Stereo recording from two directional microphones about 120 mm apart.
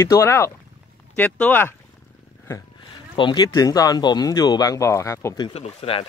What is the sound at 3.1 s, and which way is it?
Speech, 40° left (ahead or behind).